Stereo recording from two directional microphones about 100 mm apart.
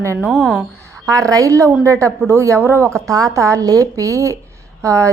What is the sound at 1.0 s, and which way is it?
A woman's voice, 35° right (ahead or behind).